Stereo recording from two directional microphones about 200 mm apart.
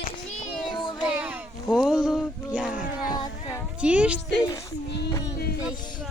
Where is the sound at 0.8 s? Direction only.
20° left (ahead or behind).